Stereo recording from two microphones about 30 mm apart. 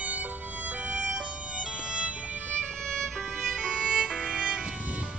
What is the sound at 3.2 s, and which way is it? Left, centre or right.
Violin, centre.